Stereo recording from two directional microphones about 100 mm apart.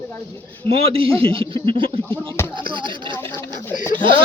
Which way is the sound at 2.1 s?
25° left (ahead or behind).